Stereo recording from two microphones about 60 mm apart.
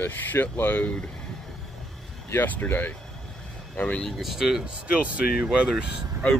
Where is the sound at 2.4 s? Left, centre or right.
Left.